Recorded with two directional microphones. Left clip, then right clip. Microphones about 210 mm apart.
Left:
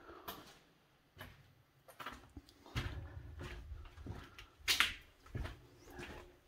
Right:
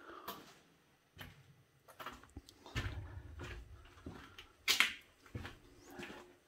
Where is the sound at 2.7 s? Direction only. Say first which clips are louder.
Right 1 dB; 20° right (ahead or behind).